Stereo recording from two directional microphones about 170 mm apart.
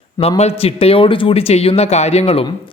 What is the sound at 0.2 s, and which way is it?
Speech, 35° left (ahead or behind).